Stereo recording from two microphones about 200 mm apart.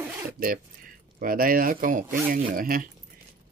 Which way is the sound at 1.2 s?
45° right (ahead or behind).